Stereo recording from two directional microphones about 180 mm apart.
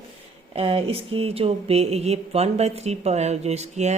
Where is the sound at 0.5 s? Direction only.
30° right (ahead or behind).